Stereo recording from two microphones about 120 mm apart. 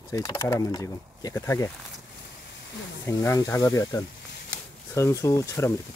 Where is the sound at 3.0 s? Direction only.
25° left (ahead or behind).